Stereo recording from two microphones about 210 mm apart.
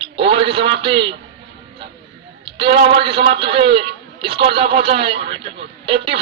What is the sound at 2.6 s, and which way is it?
A man's voice, 25° right (ahead or behind).